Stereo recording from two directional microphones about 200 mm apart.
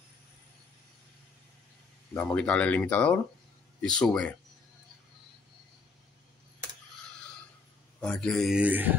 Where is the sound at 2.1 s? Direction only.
5° left (ahead or behind).